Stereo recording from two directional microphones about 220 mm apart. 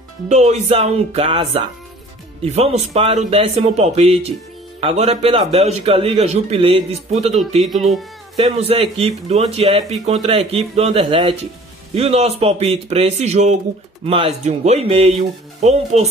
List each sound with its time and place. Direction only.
0.3 s a man's voice: 30° right (ahead or behind)
7.6 s speech: centre (ahead or behind)
8.4 s a man's voice: 25° right (ahead or behind)